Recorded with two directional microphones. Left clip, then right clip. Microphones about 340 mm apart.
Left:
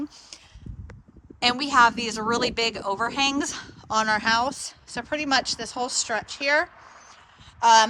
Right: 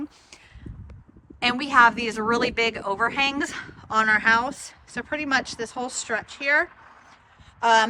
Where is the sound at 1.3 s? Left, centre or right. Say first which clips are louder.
Right 1 dB; centre.